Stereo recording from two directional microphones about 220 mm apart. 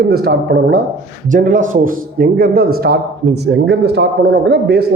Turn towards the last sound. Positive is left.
turn(degrees=-50)  # may be behind; listen again after turning